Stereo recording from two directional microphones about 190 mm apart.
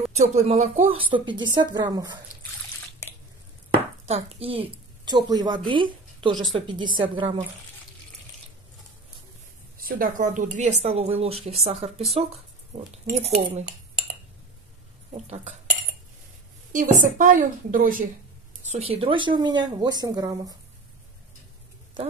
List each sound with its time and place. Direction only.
0.1 s a woman's voice: 35° right (ahead or behind)
4.1 s a woman's voice: 30° right (ahead or behind)
9.8 s a woman's voice: 45° right (ahead or behind)
15.1 s a woman's voice: 35° right (ahead or behind)
16.7 s a woman's voice: 45° right (ahead or behind)
18.7 s speech: 30° right (ahead or behind)